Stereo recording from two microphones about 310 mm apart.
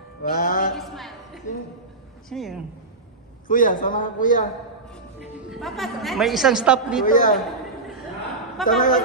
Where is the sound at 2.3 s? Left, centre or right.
Centre.